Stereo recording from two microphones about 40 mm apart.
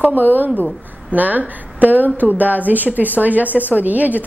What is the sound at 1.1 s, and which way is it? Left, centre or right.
A woman's voice, right.